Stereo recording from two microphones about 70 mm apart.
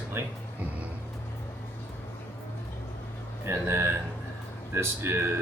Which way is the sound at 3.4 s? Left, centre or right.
Right.